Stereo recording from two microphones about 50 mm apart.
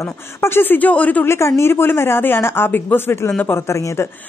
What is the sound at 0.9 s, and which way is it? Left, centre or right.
Speech, left.